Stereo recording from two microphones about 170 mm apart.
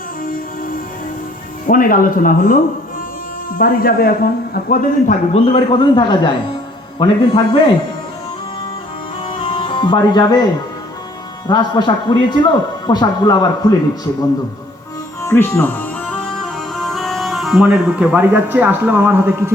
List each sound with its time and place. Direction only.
1.6 s speech: 55° left (ahead or behind)
5.3 s a man's voice: 35° left (ahead or behind)
9.2 s music: 30° left (ahead or behind)
11.4 s a man's voice: 25° left (ahead or behind)
15.2 s music: 15° left (ahead or behind); by 19.5 s 15° right (ahead or behind)